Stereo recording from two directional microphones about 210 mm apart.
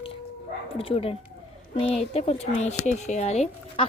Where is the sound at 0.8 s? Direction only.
25° left (ahead or behind).